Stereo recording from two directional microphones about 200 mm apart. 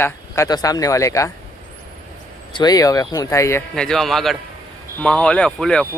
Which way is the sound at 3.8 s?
5° left (ahead or behind).